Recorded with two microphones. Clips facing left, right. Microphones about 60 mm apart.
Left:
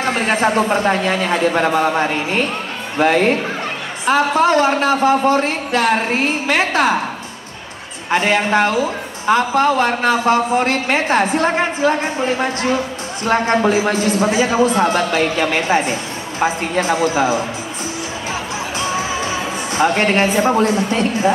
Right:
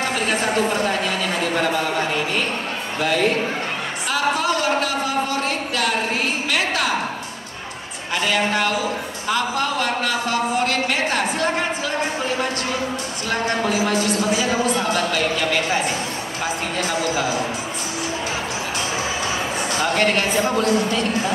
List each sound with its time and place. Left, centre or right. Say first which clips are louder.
0.1 s a man's voice: left 5 dB; left
8.1 s a man's voice: left 6 dB; left
13.2 s a man's voice: left 8 dB; left
19.7 s a woman's voice: left 5 dB; left